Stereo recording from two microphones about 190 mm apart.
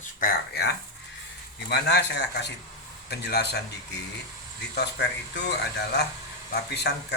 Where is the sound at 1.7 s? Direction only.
65° left (ahead or behind).